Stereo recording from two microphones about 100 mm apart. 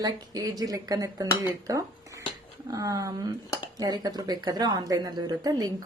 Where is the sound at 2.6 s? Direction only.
35° right (ahead or behind).